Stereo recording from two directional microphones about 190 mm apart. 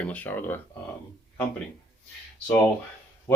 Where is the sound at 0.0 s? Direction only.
10° left (ahead or behind).